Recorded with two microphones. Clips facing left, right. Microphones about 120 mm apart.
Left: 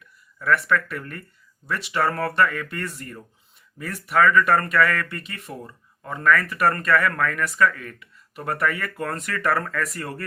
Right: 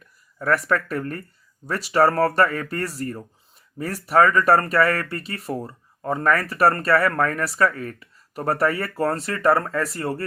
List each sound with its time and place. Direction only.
0.3 s speech: 40° right (ahead or behind)